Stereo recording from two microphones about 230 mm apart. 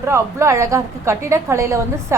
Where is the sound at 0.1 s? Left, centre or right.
Centre.